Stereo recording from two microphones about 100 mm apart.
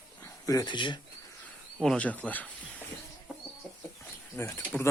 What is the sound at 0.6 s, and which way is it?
Speech, 50° left (ahead or behind).